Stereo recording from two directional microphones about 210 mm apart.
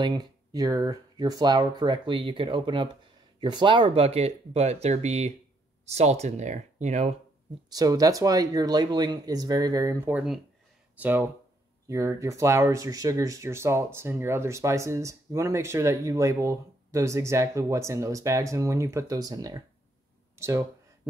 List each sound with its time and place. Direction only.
0.0 s speech: 20° right (ahead or behind)
7.7 s speech: 15° right (ahead or behind)